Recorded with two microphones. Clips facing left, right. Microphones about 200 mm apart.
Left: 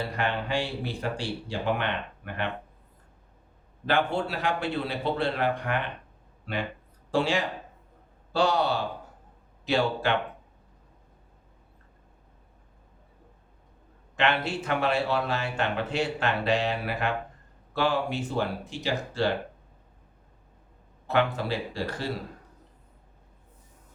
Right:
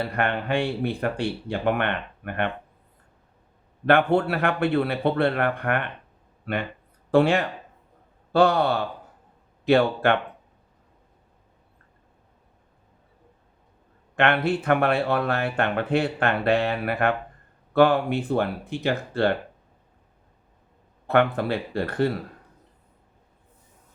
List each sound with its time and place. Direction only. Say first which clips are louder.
0.1 s speech: right 4 dB; 60° right (ahead or behind)
3.8 s speech: right 7 dB; 60° right (ahead or behind)
14.2 s speech: right 5 dB; 55° right (ahead or behind)
21.1 s speech: right 5 dB; 55° right (ahead or behind)